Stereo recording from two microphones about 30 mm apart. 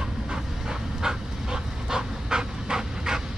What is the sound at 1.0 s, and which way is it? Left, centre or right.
Pant, centre.